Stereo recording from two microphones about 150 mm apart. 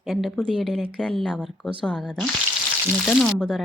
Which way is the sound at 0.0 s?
Centre (ahead or behind).